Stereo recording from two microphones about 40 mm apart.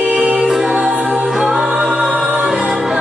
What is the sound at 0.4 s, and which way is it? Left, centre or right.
Music, centre.